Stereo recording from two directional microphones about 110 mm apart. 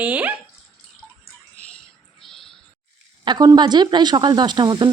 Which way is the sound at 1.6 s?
10° left (ahead or behind).